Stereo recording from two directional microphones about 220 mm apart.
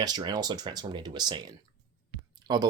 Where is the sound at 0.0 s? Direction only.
20° right (ahead or behind).